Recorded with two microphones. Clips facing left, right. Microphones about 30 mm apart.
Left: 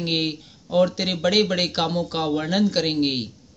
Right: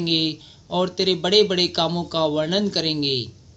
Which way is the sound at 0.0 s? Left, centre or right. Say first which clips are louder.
Right 2 dB; centre.